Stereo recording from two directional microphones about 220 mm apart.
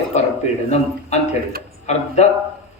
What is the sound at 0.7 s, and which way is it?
A man's voice, 30° left (ahead or behind).